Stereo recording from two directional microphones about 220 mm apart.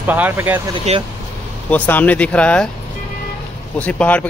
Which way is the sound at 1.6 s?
5° left (ahead or behind).